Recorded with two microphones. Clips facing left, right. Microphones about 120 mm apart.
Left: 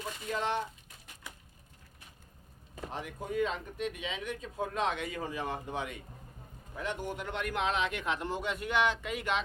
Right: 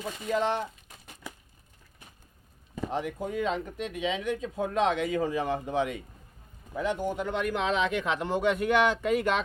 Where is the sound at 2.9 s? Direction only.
90° right.